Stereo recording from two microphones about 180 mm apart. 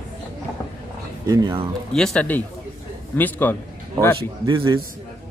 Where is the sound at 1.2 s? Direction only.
20° right (ahead or behind).